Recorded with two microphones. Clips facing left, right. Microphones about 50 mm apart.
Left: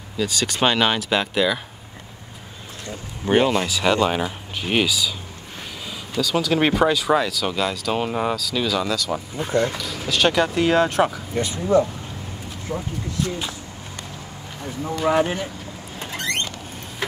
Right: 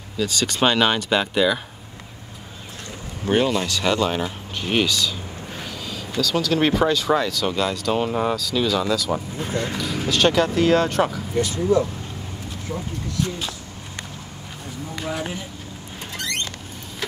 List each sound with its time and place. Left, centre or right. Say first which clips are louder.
0.2 s speech: even; centre
3.3 s speech: left 2 dB; centre
11.3 s speech: right 5 dB; left
12.7 s speech: left 2 dB; centre
15.0 s speech: left 9 dB; left